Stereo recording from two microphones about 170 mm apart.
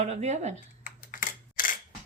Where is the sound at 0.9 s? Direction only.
50° left (ahead or behind).